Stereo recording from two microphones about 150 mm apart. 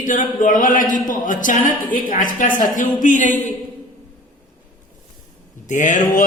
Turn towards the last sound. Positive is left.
turn(degrees=55)  # may be behind; listen again after turning